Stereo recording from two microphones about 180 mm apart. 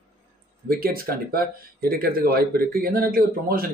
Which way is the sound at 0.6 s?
55° right (ahead or behind).